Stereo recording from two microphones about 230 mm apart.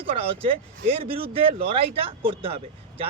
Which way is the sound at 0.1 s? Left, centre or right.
Right.